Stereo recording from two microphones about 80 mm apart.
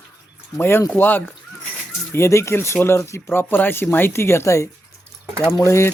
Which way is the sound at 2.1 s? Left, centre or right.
Left.